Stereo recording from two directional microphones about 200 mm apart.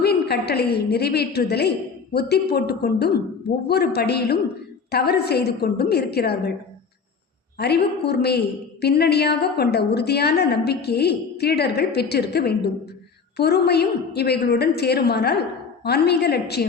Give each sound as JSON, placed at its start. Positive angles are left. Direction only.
{"t": 0.0, "sound": "a woman's voice", "side_deg": 55}
{"t": 7.6, "sound": "a woman's voice", "side_deg": 55}